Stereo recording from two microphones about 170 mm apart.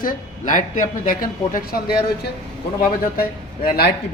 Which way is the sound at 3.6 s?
65° left (ahead or behind).